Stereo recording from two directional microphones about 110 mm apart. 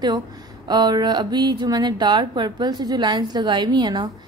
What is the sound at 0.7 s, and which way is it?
A woman's voice, 40° right (ahead or behind).